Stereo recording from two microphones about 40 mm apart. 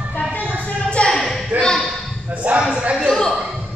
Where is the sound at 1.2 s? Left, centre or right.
Centre.